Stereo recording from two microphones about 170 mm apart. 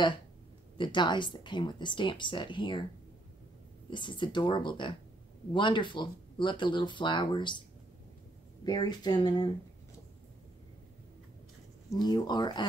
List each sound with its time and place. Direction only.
0.7 s speech: 25° left (ahead or behind)
3.9 s speech: 30° left (ahead or behind)
8.6 s speech: 25° left (ahead or behind)
12.0 s speech: 25° left (ahead or behind)